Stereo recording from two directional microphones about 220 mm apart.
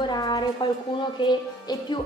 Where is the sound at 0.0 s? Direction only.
20° left (ahead or behind).